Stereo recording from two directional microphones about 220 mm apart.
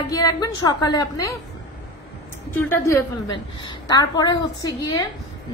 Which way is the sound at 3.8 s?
20° left (ahead or behind).